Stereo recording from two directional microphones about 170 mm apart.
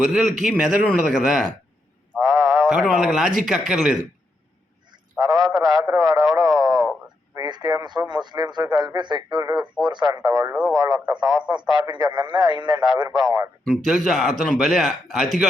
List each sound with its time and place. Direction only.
0.0 s speech: 5° right (ahead or behind)
2.1 s a sound: 20° right (ahead or behind)
2.5 s speech: 5° right (ahead or behind)
5.2 s a sound: 20° right (ahead or behind)
5.5 s speech: 20° right (ahead or behind)
6.3 s a sound: 20° right (ahead or behind)
7.3 s speech: 25° right (ahead or behind)
9.6 s speech: 5° right (ahead or behind)
9.9 s speech: 25° right (ahead or behind)
13.8 s speech: centre (ahead or behind)